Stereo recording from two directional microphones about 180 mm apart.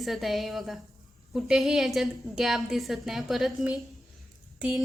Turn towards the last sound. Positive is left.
turn(degrees=-5)  # may be behind; listen again after turning